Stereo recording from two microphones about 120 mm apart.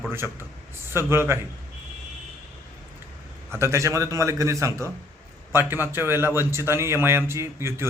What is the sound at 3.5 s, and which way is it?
A man's voice, 25° right (ahead or behind).